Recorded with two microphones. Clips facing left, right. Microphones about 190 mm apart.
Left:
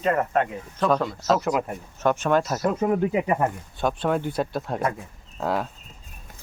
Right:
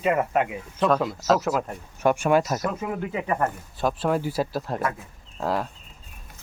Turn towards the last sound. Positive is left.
turn(degrees=0)  # may be behind; listen again after turning